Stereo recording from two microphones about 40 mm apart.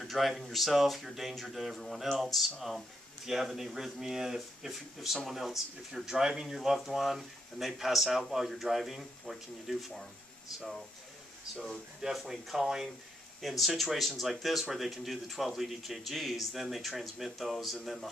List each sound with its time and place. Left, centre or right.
0.0 s speech: centre
3.3 s speech: centre
11.6 s speech: centre